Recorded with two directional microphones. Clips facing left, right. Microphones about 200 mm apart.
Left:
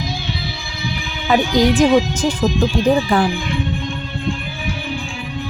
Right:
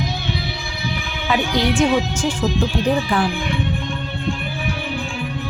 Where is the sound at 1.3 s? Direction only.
40° left (ahead or behind).